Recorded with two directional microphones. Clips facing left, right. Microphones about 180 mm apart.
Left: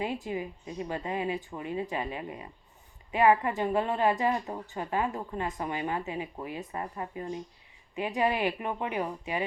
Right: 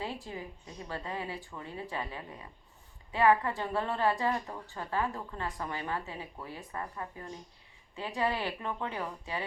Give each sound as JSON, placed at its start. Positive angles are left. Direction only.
{"t": 0.0, "sound": "a woman's voice", "side_deg": 15}